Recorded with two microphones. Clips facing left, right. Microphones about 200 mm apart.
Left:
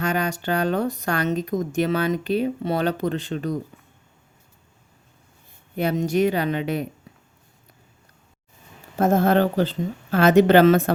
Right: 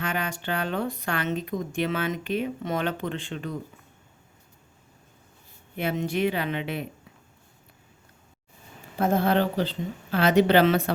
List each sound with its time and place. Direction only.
0.0 s speech: 40° left (ahead or behind)
5.7 s speech: 40° left (ahead or behind)
9.0 s a woman's voice: 45° left (ahead or behind)